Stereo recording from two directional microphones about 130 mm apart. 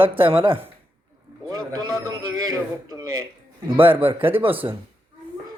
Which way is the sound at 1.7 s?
30° right (ahead or behind).